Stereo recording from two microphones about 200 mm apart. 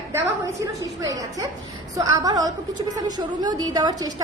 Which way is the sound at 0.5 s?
15° right (ahead or behind).